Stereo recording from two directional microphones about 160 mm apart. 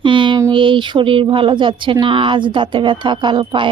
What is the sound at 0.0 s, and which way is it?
Speech, 30° right (ahead or behind).